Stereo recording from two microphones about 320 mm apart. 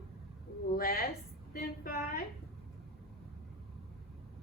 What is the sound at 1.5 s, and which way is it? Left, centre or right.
Female singing, left.